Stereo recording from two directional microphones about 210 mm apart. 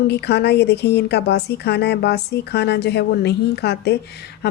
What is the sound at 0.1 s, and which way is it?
Speech, 50° left (ahead or behind).